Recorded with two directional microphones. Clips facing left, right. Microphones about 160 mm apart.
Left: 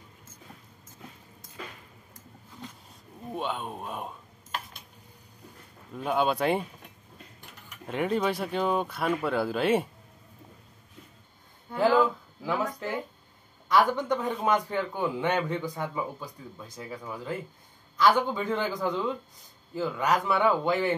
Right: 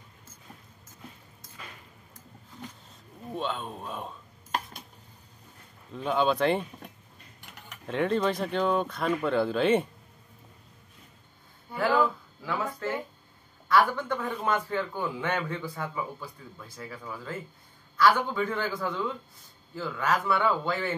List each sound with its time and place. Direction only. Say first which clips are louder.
3.3 s a man's voice: even; 10° left (ahead or behind)
5.9 s a man's voice: right 1 dB; 10° left (ahead or behind)
7.9 s a man's voice: right 1 dB; 5° left (ahead or behind)
12.4 s a sound: left 1 dB; 15° left (ahead or behind)
13.7 s a man's voice: left 1 dB; 15° left (ahead or behind)